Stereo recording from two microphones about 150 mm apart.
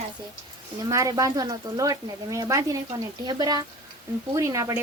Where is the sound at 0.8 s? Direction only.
20° right (ahead or behind).